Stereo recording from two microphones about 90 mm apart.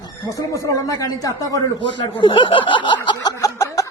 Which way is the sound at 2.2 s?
65° left (ahead or behind).